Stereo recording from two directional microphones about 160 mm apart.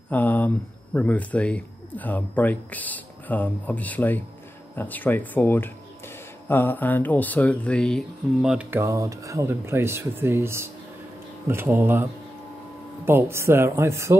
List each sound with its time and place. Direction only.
0.1 s speech: 10° left (ahead or behind); by 14.1 s 15° right (ahead or behind)